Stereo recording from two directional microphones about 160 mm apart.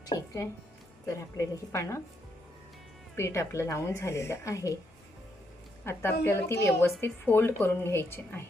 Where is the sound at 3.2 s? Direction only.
20° left (ahead or behind).